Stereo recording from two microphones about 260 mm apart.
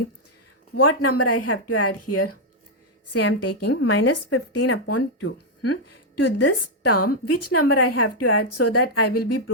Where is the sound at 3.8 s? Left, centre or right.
Left.